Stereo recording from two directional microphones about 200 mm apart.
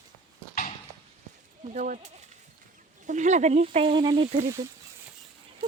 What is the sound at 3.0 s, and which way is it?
Speech, 35° right (ahead or behind).